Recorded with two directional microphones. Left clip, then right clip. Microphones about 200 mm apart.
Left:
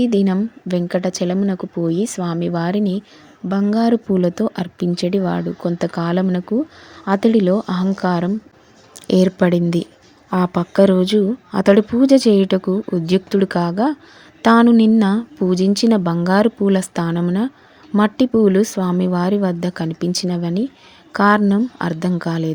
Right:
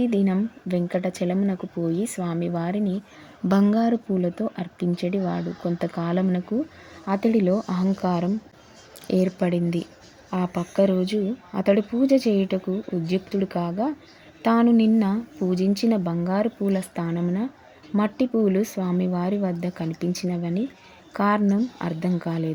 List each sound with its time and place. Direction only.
0.0 s a woman's voice: 15° left (ahead or behind)